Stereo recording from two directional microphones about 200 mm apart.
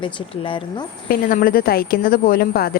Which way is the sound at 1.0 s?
45° left (ahead or behind).